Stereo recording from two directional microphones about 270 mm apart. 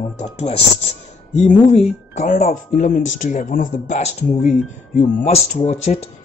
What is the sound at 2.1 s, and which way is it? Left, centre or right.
Speech, left.